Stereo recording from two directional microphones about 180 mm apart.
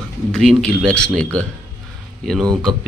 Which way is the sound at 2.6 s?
Centre (ahead or behind).